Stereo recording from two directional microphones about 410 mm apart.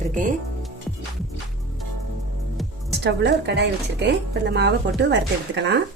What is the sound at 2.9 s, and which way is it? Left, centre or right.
A woman's voice, right.